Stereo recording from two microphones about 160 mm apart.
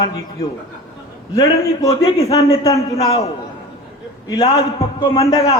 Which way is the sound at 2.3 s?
40° left (ahead or behind).